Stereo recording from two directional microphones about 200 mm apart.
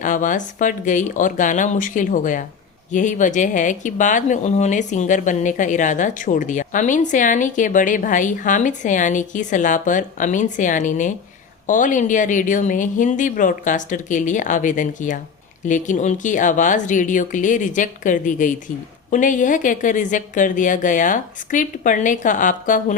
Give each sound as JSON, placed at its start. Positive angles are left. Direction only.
{"t": 0.0, "sound": "speech", "side_deg": 40}